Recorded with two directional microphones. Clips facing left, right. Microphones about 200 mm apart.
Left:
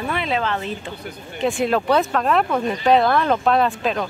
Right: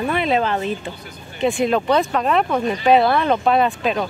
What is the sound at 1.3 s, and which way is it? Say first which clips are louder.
Speech: right 2 dB; centre (ahead or behind).